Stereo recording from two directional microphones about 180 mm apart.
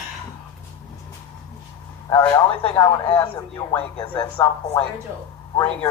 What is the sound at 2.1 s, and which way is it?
A man's voice, 15° left (ahead or behind).